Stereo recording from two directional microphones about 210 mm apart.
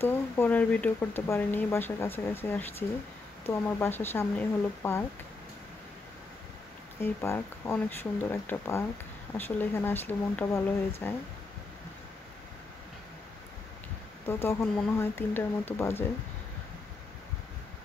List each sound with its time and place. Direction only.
0.0 s speech: 10° left (ahead or behind)
7.0 s speech: 10° left (ahead or behind)
14.2 s speech: 10° left (ahead or behind)